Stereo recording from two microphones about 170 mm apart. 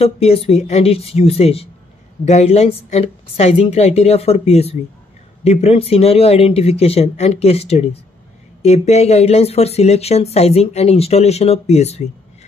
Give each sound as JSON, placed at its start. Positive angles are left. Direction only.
{"t": 0.0, "sound": "speech", "side_deg": 35}